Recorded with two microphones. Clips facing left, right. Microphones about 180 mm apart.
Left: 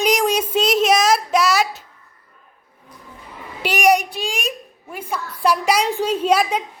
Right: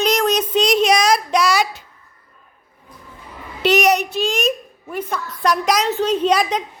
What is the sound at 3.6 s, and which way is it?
A woman's voice, 10° left (ahead or behind).